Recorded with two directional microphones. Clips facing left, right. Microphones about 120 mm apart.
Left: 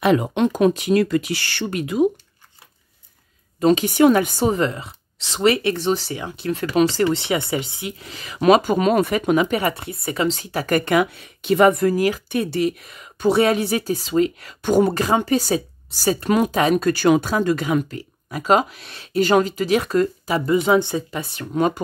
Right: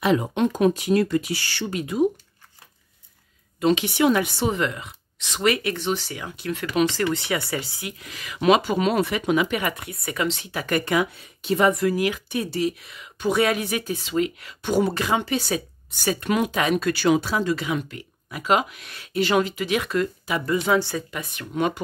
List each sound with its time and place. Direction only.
0.0 s speech: 65° left (ahead or behind)
3.5 s speech: 40° left (ahead or behind)
8.4 s speech: 45° left (ahead or behind)
10.9 s speech: 70° left (ahead or behind); by 12.2 s 40° left (ahead or behind)
12.3 s speech: 60° left (ahead or behind)
13.3 s speech: 30° left (ahead or behind)
19.1 s speech: 40° left (ahead or behind)
20.4 s speech: 20° left (ahead or behind); by 21.8 s 35° left (ahead or behind)